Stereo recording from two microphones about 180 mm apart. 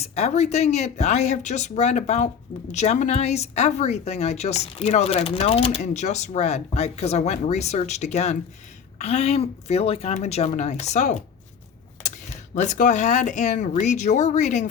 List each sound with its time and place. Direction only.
0.0 s speech: 35° left (ahead or behind)
12.5 s speech: 45° left (ahead or behind)